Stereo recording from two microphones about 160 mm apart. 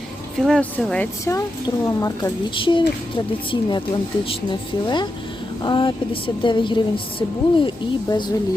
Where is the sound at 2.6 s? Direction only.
30° left (ahead or behind).